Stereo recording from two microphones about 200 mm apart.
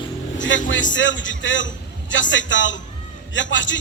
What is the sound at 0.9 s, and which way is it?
Speech, 65° left (ahead or behind).